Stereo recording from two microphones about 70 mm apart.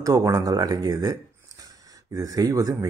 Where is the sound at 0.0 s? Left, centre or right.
Right.